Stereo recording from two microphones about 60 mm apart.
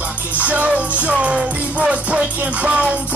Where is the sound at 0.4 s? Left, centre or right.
Right.